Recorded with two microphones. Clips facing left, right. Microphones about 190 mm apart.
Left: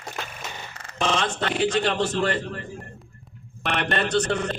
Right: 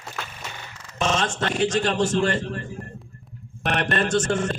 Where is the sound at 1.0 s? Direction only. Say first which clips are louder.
Right 1 dB; 45° right (ahead or behind).